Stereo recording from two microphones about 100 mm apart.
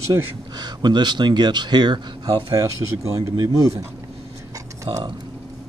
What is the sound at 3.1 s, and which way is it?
Speech, 30° right (ahead or behind).